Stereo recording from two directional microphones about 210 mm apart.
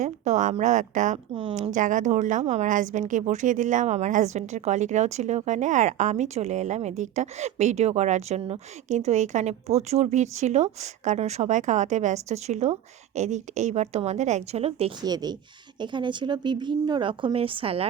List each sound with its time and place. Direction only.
0.0 s a woman's voice: 35° right (ahead or behind)
1.3 s a woman's voice: 25° right (ahead or behind)